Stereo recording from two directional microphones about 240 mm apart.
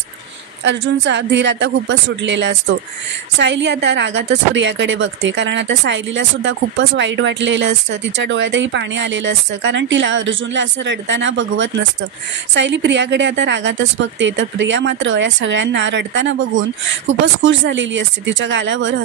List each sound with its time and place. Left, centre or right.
0.7 s speech: right